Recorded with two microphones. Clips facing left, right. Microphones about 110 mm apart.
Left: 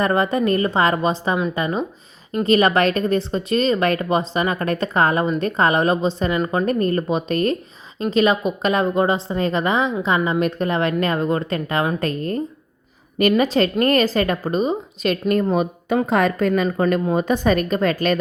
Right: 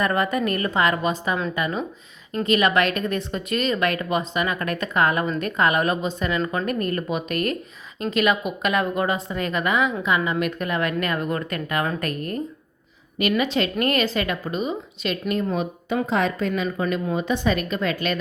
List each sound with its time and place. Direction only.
0.0 s a woman's voice: 30° left (ahead or behind)
13.1 s a woman's voice: 40° left (ahead or behind)